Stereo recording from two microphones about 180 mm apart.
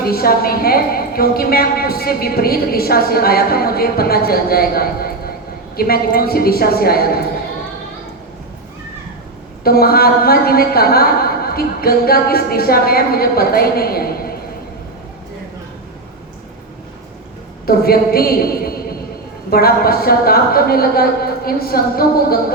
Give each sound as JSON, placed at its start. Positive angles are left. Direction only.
{"t": 0.0, "sound": "a woman's voice", "side_deg": 55}
{"t": 9.6, "sound": "a woman's voice", "side_deg": 55}
{"t": 17.7, "sound": "a woman's voice", "side_deg": 60}